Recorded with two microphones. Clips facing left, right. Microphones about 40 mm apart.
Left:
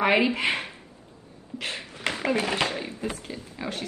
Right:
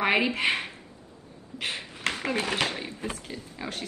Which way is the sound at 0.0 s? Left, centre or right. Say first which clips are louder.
Left 2 dB; centre.